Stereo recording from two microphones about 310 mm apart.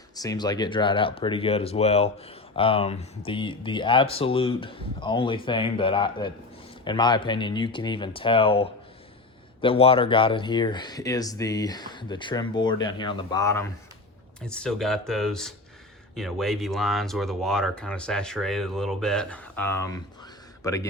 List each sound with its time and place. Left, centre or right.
0.2 s speech: centre